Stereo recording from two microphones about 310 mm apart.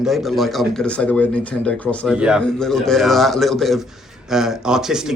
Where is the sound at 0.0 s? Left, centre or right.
Centre.